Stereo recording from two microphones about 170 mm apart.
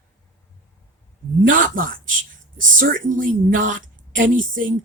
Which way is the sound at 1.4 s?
55° right (ahead or behind).